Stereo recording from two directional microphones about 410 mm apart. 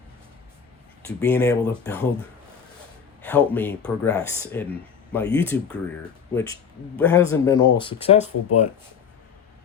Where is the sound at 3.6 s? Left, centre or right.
Centre.